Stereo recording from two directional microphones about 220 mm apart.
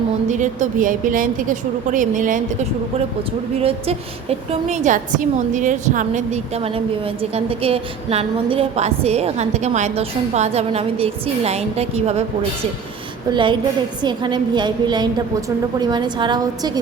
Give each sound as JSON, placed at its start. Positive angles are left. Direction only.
{"t": 0.3, "sound": "a woman's voice", "side_deg": -35}
{"t": 3.6, "sound": "a woman's voice", "side_deg": -25}